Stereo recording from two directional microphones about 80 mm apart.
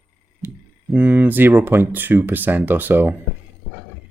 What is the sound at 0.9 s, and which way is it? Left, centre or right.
Speech, right.